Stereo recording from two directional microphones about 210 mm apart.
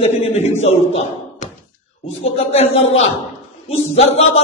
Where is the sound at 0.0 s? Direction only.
30° left (ahead or behind).